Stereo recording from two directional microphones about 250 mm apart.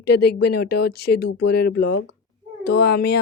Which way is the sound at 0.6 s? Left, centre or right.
Left.